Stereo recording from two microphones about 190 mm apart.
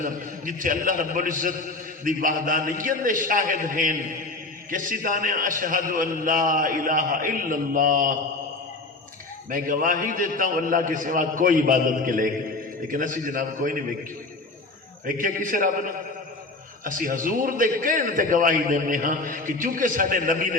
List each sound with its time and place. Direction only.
0.0 s a man's voice: 45° right (ahead or behind)
9.5 s a man's voice: 45° right (ahead or behind)
15.0 s a man's voice: 45° right (ahead or behind)
16.8 s a man's voice: 45° right (ahead or behind)